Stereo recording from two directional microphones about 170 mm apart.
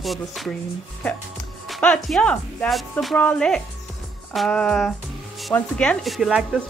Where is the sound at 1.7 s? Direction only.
5° left (ahead or behind).